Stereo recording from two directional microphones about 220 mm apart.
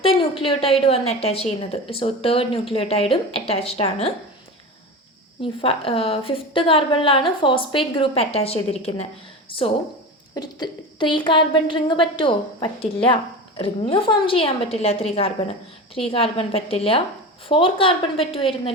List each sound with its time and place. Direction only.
0.0 s a woman's voice: 25° left (ahead or behind)
5.4 s a woman's voice: 25° left (ahead or behind)